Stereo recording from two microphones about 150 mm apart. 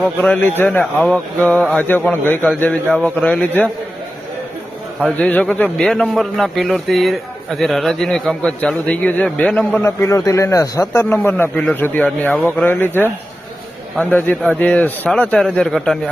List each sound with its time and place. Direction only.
0.2 s a man's voice: 15° left (ahead or behind)
5.0 s a man's voice: 10° left (ahead or behind)
9.8 s a man's voice: 20° left (ahead or behind); by 16.0 s 5° left (ahead or behind)